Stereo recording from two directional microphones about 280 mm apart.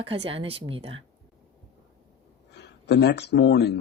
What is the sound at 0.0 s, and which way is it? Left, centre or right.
Speech, centre.